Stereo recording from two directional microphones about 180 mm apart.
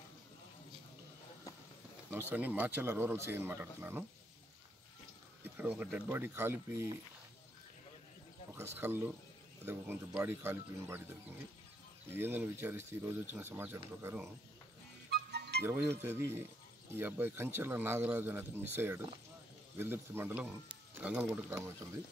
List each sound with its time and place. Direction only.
2.0 s a man's voice: 10° right (ahead or behind)
5.4 s a man's voice: 10° right (ahead or behind)
8.5 s a man's voice: 10° right (ahead or behind)
12.1 s a man's voice: 10° right (ahead or behind)
15.0 s music: 65° right (ahead or behind)
15.6 s a man's voice: 10° right (ahead or behind)